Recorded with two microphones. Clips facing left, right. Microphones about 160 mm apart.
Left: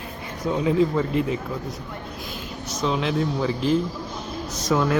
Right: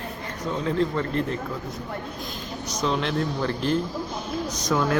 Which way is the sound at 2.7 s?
Centre (ahead or behind).